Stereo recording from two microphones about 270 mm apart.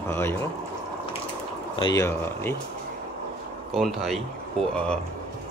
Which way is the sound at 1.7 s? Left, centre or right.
Centre.